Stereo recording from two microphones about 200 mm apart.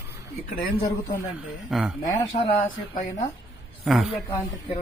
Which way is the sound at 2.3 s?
35° left (ahead or behind).